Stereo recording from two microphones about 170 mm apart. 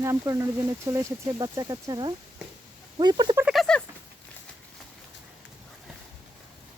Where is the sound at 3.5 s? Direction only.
Centre (ahead or behind).